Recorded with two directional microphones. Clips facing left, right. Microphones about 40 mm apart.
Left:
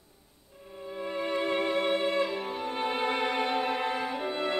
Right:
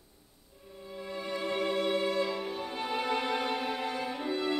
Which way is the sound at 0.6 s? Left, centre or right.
Left.